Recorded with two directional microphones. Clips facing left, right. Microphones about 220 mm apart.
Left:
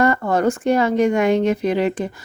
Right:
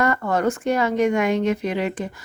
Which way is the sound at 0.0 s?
30° left (ahead or behind).